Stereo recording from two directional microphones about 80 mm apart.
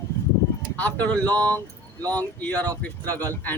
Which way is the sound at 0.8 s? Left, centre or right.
Centre.